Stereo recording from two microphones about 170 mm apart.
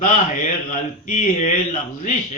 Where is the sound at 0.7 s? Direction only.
50° left (ahead or behind).